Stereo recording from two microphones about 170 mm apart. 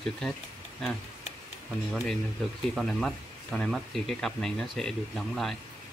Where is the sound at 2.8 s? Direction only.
Centre (ahead or behind).